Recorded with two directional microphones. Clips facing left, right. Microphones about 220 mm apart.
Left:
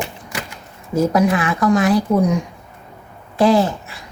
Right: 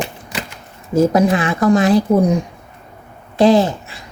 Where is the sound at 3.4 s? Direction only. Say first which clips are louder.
Right 3 dB; 20° right (ahead or behind).